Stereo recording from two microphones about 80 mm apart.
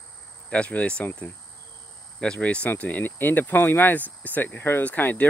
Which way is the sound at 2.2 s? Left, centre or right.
Centre.